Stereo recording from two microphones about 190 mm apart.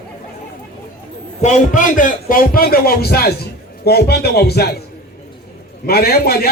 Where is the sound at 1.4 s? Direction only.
40° left (ahead or behind); by 4.7 s 55° left (ahead or behind).